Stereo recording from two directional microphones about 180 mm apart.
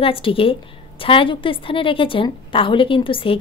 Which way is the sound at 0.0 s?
30° left (ahead or behind).